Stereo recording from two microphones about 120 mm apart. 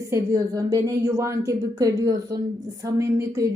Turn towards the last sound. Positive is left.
turn(degrees=-25)  # may be behind; listen again after turning